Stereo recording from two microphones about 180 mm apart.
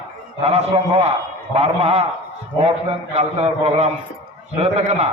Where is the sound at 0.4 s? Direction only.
35° right (ahead or behind).